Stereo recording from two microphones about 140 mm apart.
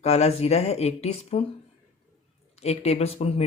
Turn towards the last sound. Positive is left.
turn(degrees=45)  # may be behind; listen again after turning